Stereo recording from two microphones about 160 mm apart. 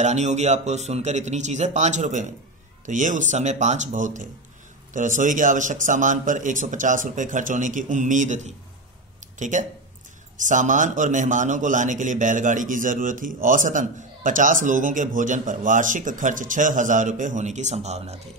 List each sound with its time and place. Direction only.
0.0 s a man's voice: 45° right (ahead or behind)